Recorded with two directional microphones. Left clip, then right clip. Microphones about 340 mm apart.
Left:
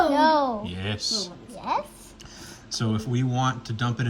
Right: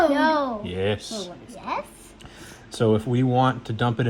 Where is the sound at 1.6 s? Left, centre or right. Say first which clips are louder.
Left 2 dB; left.